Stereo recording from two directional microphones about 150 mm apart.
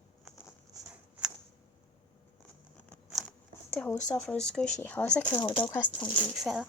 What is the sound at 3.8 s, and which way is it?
Speech, 10° left (ahead or behind).